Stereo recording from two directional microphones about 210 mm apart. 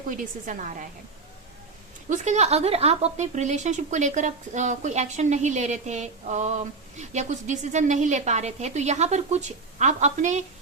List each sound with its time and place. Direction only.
0.1 s a woman's voice: 40° right (ahead or behind)
2.0 s a woman's voice: 35° right (ahead or behind)